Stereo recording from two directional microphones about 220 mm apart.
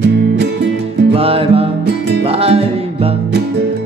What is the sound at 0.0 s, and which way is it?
Music, 50° right (ahead or behind).